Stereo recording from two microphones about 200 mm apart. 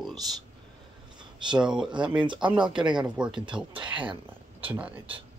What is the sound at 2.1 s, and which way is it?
Speech, 25° right (ahead or behind).